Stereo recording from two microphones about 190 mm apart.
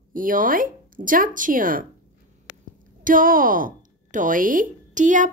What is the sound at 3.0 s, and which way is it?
Speech, 45° right (ahead or behind).